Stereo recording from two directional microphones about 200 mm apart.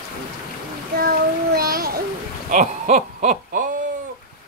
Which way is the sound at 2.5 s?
35° right (ahead or behind).